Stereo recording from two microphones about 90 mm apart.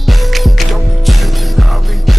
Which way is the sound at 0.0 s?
Centre (ahead or behind).